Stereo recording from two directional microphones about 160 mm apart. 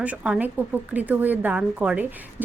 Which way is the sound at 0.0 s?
10° right (ahead or behind).